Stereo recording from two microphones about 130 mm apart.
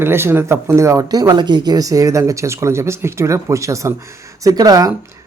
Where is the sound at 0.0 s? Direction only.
20° right (ahead or behind).